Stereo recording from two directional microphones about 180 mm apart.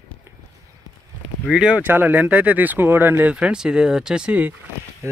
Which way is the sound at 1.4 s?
5° right (ahead or behind).